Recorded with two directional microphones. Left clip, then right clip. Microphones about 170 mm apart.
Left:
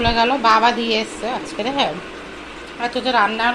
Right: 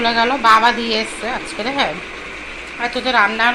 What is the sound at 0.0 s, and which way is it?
A woman's voice, 5° left (ahead or behind).